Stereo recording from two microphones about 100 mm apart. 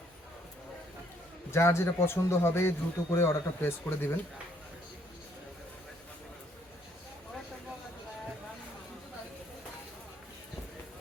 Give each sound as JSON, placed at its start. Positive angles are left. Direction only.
{"t": 1.5, "sound": "a man's voice", "side_deg": 25}